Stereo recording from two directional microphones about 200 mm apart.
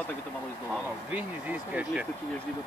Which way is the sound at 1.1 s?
10° right (ahead or behind).